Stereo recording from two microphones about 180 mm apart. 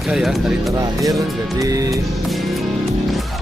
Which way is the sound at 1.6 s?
20° right (ahead or behind).